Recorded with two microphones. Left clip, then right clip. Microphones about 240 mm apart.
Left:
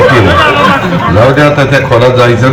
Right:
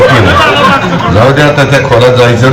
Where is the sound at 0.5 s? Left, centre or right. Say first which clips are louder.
Right 1 dB; right.